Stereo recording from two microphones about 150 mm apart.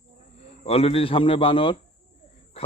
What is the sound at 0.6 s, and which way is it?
A man's voice, 40° left (ahead or behind).